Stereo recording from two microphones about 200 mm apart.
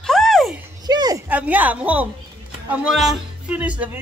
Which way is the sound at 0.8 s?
20° right (ahead or behind).